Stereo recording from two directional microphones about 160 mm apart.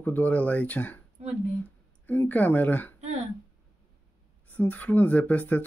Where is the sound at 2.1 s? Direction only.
10° left (ahead or behind).